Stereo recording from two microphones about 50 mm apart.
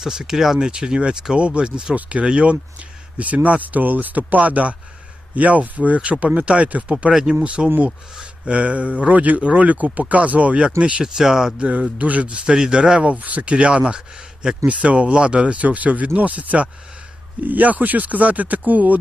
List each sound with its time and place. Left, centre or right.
0.0 s speech: centre
7.1 s speech: centre
7.4 s speech: right
11.0 s speech: centre
11.8 s speech: right
12.5 s speech: centre
13.1 s speech: right